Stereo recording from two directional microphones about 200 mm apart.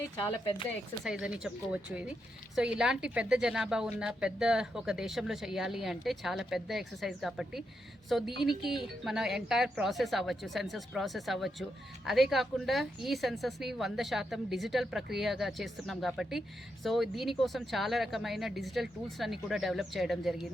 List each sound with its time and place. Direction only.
1.0 s a woman's voice: 5° right (ahead or behind)